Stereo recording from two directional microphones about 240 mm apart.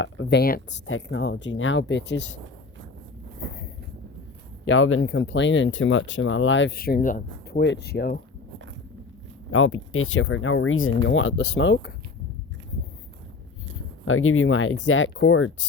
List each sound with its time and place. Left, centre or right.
0.0 s speech: left
0.9 s speech: left
4.6 s speech: left
7.6 s speech: left
9.5 s speech: left
14.0 s speech: left